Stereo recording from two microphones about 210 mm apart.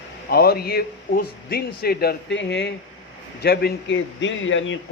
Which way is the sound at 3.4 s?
50° left (ahead or behind).